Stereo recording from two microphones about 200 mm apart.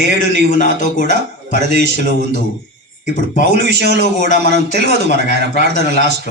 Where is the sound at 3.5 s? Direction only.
55° right (ahead or behind).